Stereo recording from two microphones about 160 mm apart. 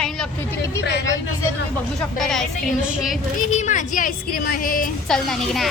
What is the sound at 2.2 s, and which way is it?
A child's voice, centre (ahead or behind).